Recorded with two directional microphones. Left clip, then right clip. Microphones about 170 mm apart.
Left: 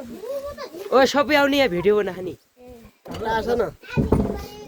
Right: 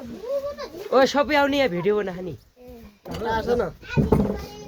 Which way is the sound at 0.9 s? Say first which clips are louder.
Left 2 dB; 90° left.